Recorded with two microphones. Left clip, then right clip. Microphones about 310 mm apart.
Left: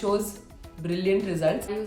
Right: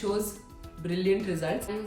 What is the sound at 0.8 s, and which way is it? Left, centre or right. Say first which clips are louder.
Speech: left 2 dB; centre.